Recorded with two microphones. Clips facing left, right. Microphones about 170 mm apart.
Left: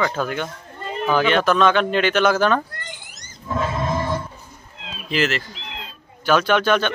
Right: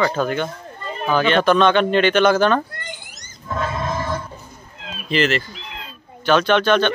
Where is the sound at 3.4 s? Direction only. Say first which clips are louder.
Left 1 dB; 10° left (ahead or behind).